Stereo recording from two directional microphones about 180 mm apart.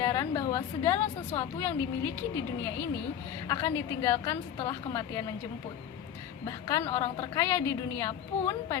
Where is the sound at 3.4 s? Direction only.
20° left (ahead or behind).